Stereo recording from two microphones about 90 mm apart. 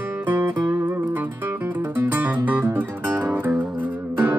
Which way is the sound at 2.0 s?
25° right (ahead or behind).